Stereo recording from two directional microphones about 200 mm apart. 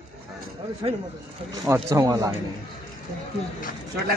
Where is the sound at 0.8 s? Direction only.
25° right (ahead or behind).